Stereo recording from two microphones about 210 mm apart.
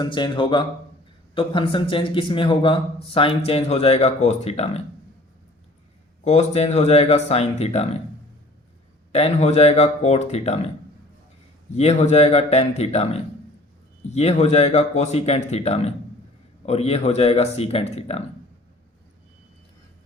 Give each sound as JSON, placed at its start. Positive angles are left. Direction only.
{"t": 0.0, "sound": "a man's voice", "side_deg": 20}
{"t": 6.2, "sound": "speech", "side_deg": 30}
{"t": 9.1, "sound": "speech", "side_deg": 30}
{"t": 11.7, "sound": "a man's voice", "side_deg": 30}